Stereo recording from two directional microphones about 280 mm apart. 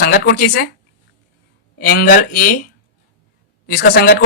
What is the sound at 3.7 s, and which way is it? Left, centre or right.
Speech, left.